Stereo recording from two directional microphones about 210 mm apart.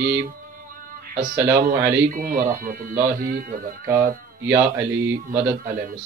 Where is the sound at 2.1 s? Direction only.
45° right (ahead or behind).